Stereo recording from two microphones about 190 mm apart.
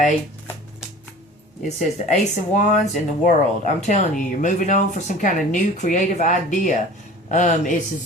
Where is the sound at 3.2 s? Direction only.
40° left (ahead or behind).